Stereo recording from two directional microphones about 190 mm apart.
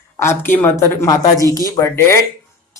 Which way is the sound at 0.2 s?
10° left (ahead or behind).